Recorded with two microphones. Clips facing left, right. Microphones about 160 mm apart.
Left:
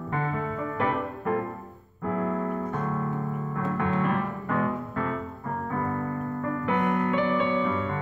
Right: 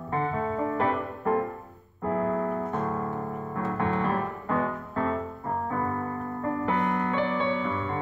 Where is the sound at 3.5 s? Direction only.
30° right (ahead or behind).